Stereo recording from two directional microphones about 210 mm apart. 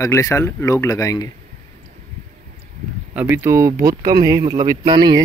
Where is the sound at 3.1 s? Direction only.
10° right (ahead or behind).